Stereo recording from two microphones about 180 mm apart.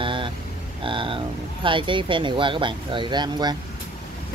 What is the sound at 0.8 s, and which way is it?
Speech, 30° right (ahead or behind).